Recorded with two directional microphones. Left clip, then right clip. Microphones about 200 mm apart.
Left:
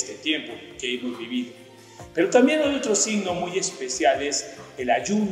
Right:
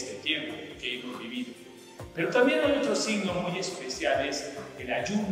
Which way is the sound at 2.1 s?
40° left (ahead or behind).